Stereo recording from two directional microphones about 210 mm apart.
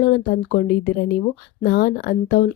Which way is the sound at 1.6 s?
45° left (ahead or behind).